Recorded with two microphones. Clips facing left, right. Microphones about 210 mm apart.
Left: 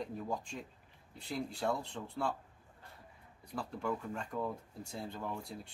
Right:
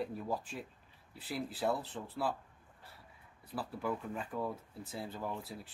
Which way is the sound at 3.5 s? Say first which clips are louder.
Even; 5° right (ahead or behind).